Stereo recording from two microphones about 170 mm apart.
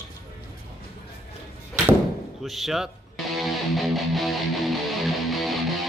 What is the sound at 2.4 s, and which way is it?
Speech, centre (ahead or behind).